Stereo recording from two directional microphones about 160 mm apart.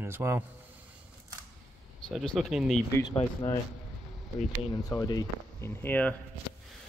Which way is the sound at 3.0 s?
20° left (ahead or behind).